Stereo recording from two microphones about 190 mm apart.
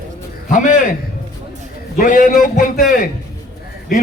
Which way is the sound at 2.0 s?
45° left (ahead or behind).